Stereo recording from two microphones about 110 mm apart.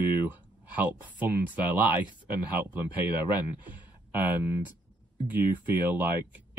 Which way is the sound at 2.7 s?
15° right (ahead or behind).